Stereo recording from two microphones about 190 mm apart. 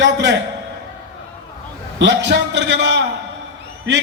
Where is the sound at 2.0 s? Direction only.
70° right (ahead or behind).